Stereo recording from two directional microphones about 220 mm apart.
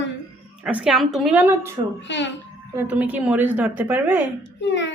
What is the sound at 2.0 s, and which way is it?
Speech, 55° left (ahead or behind).